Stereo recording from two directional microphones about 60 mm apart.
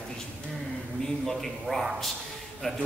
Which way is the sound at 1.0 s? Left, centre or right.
Centre.